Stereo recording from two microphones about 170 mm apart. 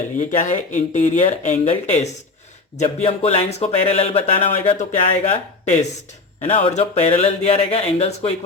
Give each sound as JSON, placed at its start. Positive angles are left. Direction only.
{"t": 0.2, "sound": "speech", "side_deg": 45}